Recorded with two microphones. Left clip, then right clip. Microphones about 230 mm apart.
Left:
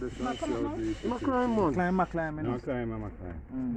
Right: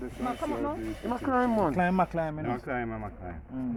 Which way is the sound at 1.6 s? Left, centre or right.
Right.